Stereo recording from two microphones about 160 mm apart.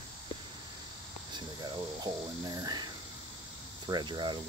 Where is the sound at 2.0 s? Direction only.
25° right (ahead or behind).